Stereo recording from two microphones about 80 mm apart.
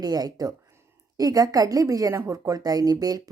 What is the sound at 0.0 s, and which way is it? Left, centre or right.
A woman's voice, right.